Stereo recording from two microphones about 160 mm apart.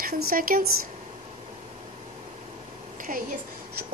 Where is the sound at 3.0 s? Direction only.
60° right (ahead or behind).